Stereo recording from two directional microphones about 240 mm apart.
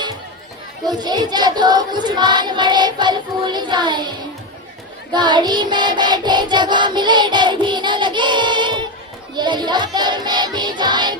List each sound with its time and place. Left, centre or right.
0.9 s child singing: centre
5.1 s music: centre